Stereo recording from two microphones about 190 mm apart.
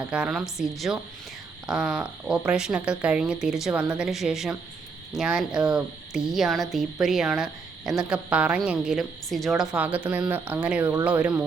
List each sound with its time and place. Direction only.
0.0 s speech: 5° right (ahead or behind)